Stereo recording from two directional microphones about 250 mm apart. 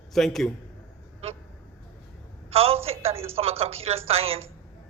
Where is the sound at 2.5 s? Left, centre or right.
Right.